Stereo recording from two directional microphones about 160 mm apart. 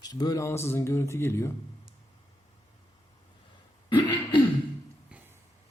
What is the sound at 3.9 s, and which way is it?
Throat clearing, 30° left (ahead or behind).